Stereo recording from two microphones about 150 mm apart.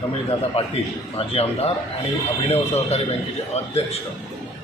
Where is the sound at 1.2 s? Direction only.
40° left (ahead or behind).